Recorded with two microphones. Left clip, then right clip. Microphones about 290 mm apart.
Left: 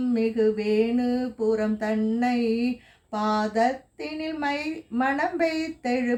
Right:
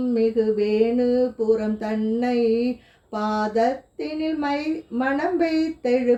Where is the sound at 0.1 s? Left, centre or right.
Left.